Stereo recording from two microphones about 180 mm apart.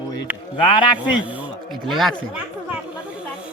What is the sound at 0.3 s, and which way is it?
Speech, 10° right (ahead or behind).